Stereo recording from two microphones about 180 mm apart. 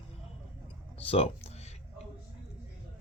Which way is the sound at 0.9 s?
30° left (ahead or behind).